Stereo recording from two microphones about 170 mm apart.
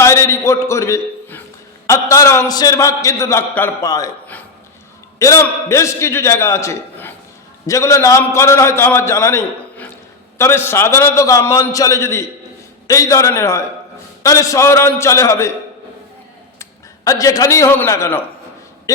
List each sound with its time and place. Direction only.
0.0 s a man's voice: 15° left (ahead or behind)
5.2 s a man's voice: 15° left (ahead or behind)
16.6 s a man's voice: 20° left (ahead or behind)